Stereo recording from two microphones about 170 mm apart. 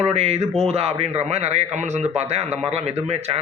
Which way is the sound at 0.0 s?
40° right (ahead or behind).